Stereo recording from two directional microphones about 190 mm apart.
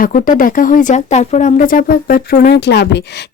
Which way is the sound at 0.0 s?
45° left (ahead or behind).